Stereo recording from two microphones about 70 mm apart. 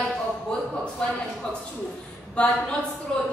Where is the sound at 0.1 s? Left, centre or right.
Centre.